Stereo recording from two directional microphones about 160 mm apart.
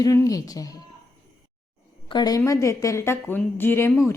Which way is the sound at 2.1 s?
25° left (ahead or behind).